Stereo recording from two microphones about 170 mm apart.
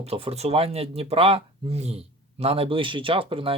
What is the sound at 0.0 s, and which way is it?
Speech, 35° right (ahead or behind).